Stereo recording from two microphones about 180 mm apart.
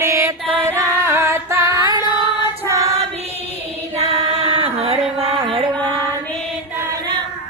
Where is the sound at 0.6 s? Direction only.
15° right (ahead or behind).